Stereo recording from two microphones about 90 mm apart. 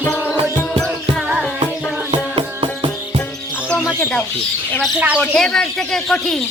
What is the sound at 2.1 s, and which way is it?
Music, 75° right (ahead or behind).